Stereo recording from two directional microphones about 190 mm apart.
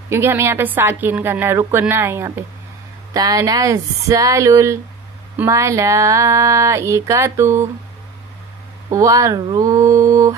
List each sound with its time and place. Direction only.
0.1 s a woman's voice: 15° right (ahead or behind)
8.9 s a woman's voice: 15° right (ahead or behind)